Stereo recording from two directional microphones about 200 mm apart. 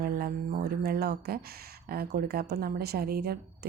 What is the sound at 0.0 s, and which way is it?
A woman's voice, 50° right (ahead or behind).